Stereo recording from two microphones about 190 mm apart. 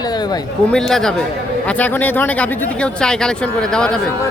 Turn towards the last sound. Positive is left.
turn(degrees=5)  # may be behind; listen again after turning